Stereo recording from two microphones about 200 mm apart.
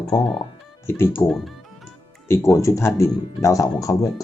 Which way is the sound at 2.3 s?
15° left (ahead or behind).